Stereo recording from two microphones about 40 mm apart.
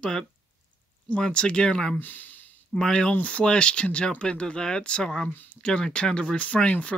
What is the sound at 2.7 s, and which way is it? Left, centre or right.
Speech, left.